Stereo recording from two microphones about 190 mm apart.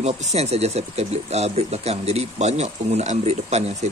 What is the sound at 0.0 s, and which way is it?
Speech, 35° right (ahead or behind).